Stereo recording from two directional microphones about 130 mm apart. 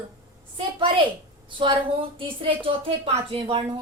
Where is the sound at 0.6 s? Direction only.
35° right (ahead or behind).